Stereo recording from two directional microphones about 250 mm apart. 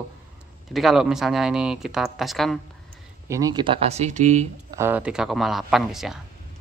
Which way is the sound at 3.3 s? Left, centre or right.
Centre.